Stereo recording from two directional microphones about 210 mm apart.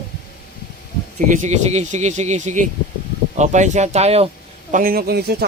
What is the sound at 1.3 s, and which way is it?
Speech, 35° right (ahead or behind).